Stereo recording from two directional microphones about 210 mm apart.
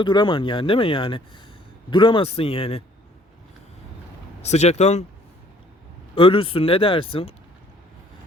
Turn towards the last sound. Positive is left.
turn(degrees=25)  # may be behind; listen again after turning